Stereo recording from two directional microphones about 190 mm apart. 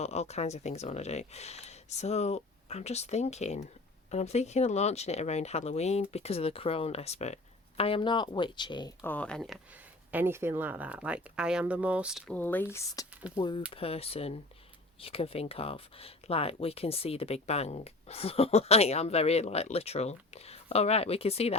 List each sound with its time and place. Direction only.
0.0 s speech: 35° left (ahead or behind)
9.0 s speech: 10° left (ahead or behind)
10.1 s speech: 10° right (ahead or behind)
12.3 s speech: 10° left (ahead or behind)
13.3 s speech: 25° left (ahead or behind)